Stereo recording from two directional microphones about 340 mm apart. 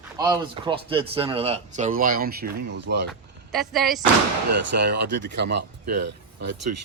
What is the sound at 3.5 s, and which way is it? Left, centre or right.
Speech, centre.